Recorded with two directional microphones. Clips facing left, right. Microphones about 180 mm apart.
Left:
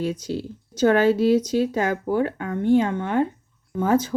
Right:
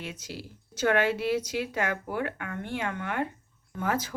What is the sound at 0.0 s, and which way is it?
A woman's voice, 30° left (ahead or behind).